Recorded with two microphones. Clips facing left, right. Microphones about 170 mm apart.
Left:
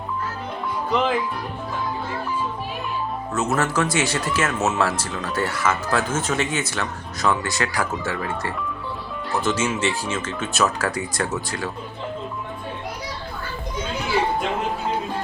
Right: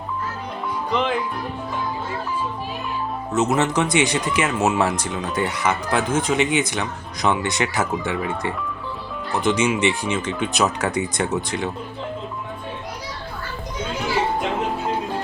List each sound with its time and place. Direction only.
0.9 s speech: centre (ahead or behind)
3.3 s speech: 20° right (ahead or behind)